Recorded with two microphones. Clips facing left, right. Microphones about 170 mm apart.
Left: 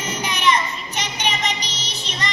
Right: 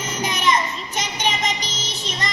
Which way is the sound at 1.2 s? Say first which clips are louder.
Right 1 dB; 45° right (ahead or behind).